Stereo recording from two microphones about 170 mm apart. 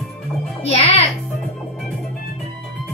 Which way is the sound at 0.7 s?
35° left (ahead or behind).